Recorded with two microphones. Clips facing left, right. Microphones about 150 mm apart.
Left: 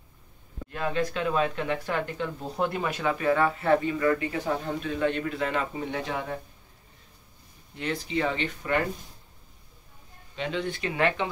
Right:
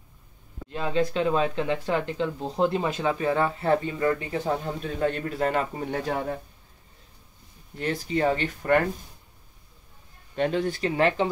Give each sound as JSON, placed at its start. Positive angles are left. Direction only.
{"t": 0.7, "sound": "speech", "side_deg": -20}
{"t": 7.7, "sound": "speech", "side_deg": -45}
{"t": 10.3, "sound": "speech", "side_deg": -45}